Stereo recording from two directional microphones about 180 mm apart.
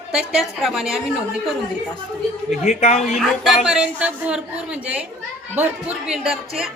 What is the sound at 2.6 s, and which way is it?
Speech, 40° left (ahead or behind).